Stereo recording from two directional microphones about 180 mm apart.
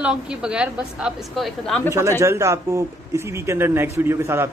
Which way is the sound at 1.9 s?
15° right (ahead or behind).